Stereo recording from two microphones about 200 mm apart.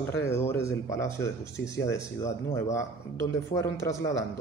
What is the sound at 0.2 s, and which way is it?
Speech, 10° left (ahead or behind).